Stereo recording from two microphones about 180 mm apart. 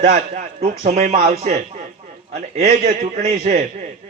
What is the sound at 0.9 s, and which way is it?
Speech, 35° right (ahead or behind).